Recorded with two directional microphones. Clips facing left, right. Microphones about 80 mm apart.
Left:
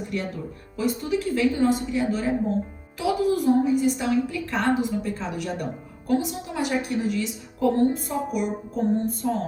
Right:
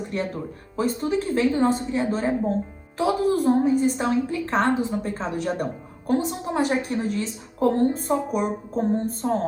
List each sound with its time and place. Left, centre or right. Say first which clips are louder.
0.1 s a woman's voice: right 2 dB; right